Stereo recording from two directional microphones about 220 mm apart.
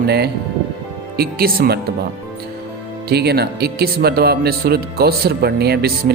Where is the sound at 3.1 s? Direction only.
45° right (ahead or behind).